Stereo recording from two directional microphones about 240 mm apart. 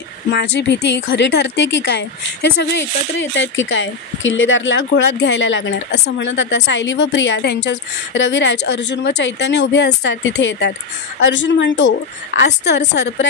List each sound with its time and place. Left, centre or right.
0.3 s speech: left